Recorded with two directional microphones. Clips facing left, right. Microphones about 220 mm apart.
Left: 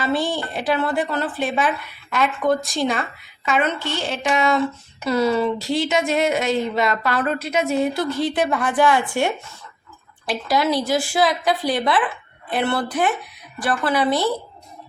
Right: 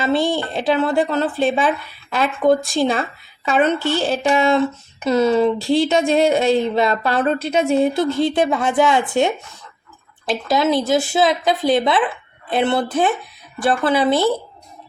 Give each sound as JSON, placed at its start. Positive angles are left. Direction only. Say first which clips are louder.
{"t": 0.0, "sound": "speech", "louder": "right 4 dB", "side_deg": -25}